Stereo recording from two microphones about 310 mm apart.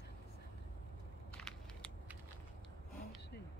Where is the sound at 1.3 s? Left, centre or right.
Centre.